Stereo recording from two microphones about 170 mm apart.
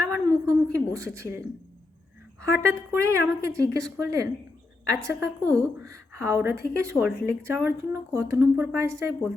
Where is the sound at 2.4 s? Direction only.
15° right (ahead or behind).